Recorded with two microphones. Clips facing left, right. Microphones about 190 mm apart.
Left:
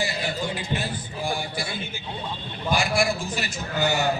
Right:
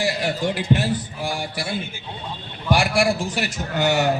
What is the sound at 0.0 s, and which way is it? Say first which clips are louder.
A man's voice: right 5 dB; 85° right.